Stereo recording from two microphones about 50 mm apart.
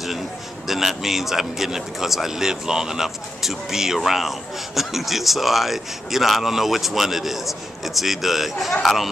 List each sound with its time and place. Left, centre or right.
0.7 s a man's voice: centre